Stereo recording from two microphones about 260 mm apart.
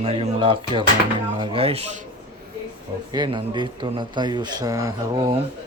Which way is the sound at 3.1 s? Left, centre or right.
Centre.